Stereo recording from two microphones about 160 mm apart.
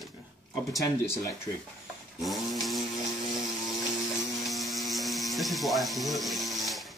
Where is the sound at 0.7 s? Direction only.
20° left (ahead or behind).